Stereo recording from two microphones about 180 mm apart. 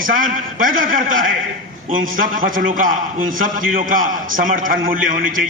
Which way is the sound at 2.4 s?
50° right (ahead or behind).